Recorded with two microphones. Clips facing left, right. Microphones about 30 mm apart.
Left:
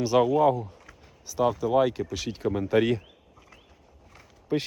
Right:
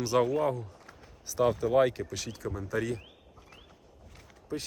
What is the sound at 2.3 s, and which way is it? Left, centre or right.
Speech, left.